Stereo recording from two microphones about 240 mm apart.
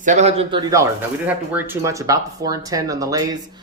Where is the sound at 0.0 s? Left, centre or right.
Right.